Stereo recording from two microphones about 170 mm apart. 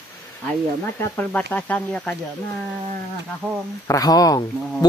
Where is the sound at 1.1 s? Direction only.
10° left (ahead or behind).